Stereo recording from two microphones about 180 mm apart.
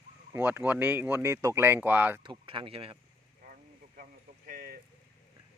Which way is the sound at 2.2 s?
25° right (ahead or behind).